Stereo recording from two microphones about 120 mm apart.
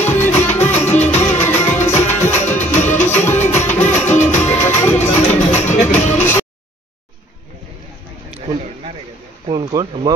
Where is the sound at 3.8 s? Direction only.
75° left (ahead or behind).